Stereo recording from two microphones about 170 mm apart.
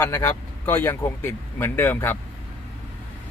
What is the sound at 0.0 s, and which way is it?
A man's voice, 15° left (ahead or behind).